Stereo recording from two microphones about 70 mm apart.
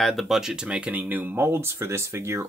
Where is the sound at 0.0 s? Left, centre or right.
Centre.